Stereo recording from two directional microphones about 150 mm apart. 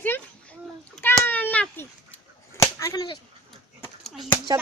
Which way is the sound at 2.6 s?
20° left (ahead or behind).